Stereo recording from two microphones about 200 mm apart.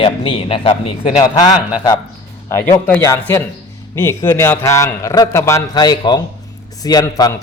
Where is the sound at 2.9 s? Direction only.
10° left (ahead or behind).